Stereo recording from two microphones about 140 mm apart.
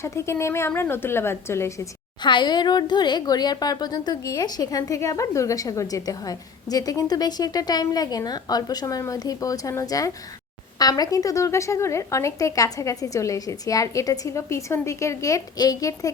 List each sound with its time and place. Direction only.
0.0 s a woman's voice: 20° left (ahead or behind)
2.2 s a woman's voice: 35° left (ahead or behind)